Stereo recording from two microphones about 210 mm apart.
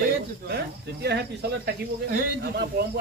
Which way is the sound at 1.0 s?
50° right (ahead or behind).